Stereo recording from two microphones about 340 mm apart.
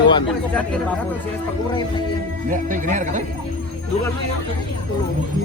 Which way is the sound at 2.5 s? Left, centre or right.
Right.